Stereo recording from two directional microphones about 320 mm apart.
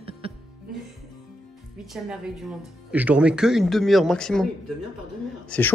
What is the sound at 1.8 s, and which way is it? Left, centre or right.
Speech, centre.